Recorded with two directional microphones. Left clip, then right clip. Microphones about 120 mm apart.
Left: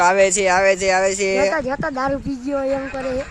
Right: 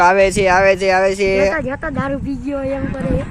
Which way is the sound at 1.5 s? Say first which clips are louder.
Even; 30° left (ahead or behind).